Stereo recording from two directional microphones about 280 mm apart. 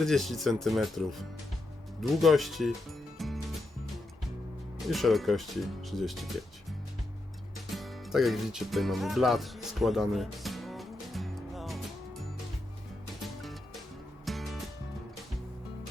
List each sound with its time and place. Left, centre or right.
0.0 s speech: centre
3.2 s music: centre
4.9 s speech: centre
7.8 s music: centre
13.2 s music: centre